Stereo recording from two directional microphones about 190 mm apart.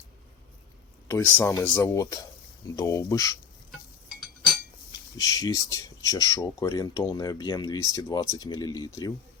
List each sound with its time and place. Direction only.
1.0 s speech: 10° left (ahead or behind)
4.9 s speech: 20° left (ahead or behind)